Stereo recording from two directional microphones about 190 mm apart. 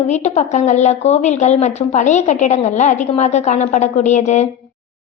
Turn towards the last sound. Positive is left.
turn(degrees=40)  # may be behind; listen again after turning